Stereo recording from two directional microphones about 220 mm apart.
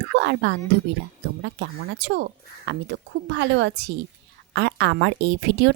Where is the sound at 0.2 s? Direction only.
50° right (ahead or behind).